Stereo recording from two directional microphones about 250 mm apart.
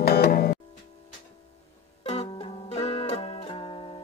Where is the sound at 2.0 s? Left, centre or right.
Left.